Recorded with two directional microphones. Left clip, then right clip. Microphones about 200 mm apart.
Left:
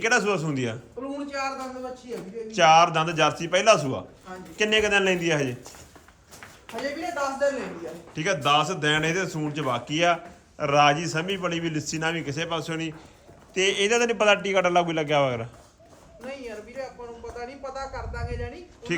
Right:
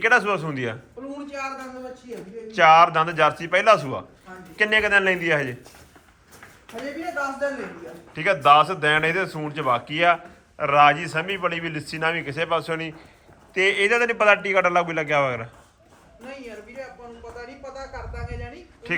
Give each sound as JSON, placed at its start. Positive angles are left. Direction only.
{"t": 0.0, "sound": "a man's voice", "side_deg": 10}
{"t": 6.7, "sound": "speech", "side_deg": 5}
{"t": 8.1, "sound": "a man's voice", "side_deg": 10}
{"t": 16.2, "sound": "a sound", "side_deg": 0}